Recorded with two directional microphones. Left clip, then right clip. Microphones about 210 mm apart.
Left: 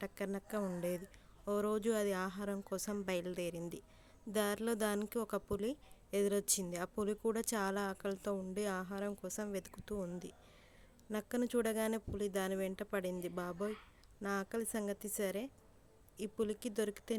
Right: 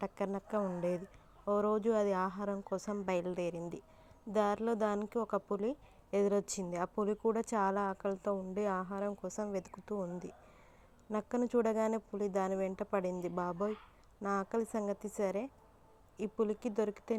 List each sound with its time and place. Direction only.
0.0 s a woman's voice: centre (ahead or behind)
9.9 s speech: 20° left (ahead or behind)
11.1 s a woman's voice: centre (ahead or behind)